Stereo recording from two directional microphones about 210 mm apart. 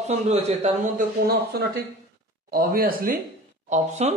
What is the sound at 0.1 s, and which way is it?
Speech, 30° right (ahead or behind).